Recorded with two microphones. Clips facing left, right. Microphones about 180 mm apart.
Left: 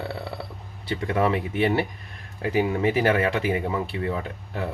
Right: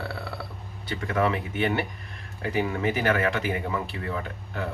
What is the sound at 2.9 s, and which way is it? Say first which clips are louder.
Speech: left 3 dB; 30° left (ahead or behind).